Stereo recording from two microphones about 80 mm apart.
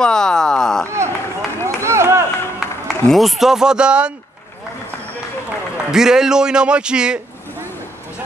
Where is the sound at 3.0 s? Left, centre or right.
Centre.